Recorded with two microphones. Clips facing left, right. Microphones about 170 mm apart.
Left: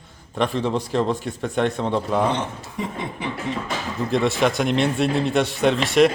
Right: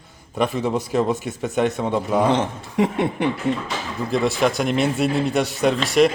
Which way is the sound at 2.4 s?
90° right.